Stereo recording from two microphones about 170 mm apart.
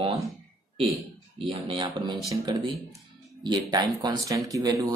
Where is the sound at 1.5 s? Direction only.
30° right (ahead or behind).